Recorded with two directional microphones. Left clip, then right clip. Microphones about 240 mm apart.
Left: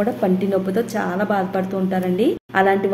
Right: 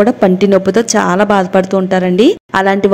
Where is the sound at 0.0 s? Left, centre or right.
Right.